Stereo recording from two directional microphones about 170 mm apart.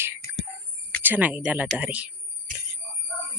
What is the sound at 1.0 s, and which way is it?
Speech, 10° right (ahead or behind).